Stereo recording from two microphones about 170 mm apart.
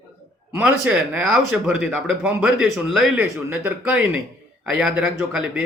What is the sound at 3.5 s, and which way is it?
Speech, 15° right (ahead or behind).